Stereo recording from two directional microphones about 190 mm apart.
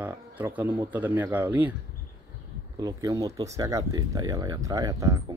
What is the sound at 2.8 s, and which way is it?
Speech, 20° right (ahead or behind).